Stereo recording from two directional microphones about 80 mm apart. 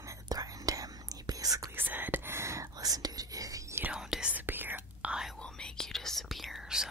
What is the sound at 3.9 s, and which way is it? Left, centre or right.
Whispering, centre.